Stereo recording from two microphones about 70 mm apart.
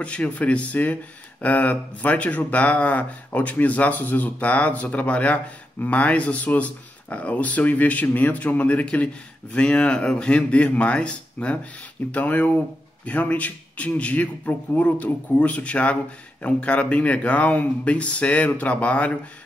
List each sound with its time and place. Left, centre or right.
0.0 s speech: centre